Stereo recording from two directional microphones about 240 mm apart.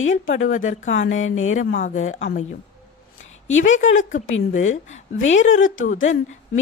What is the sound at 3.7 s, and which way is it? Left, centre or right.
A woman's voice, left.